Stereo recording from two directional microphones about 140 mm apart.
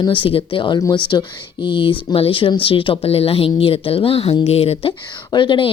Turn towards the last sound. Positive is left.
turn(degrees=35)  # may be behind; listen again after turning